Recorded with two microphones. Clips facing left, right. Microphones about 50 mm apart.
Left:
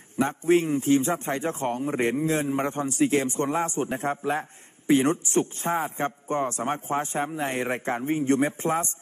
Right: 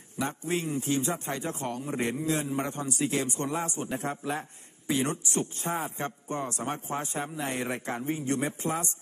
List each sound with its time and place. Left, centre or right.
0.2 s a man's voice: left